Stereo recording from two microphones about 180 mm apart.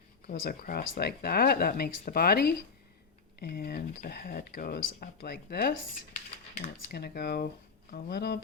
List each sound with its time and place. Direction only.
0.3 s speech: 50° left (ahead or behind)
6.9 s speech: 60° left (ahead or behind)